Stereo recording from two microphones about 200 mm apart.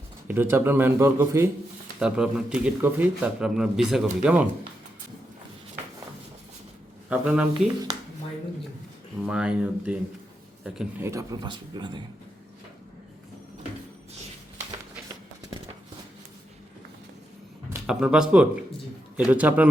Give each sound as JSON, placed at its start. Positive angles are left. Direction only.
{"t": 0.3, "sound": "a man's voice", "side_deg": -10}
{"t": 7.1, "sound": "a man's voice", "side_deg": -5}
{"t": 9.2, "sound": "a man's voice", "side_deg": -5}
{"t": 17.7, "sound": "a man's voice", "side_deg": -5}